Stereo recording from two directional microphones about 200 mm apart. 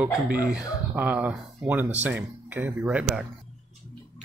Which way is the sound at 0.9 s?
10° right (ahead or behind).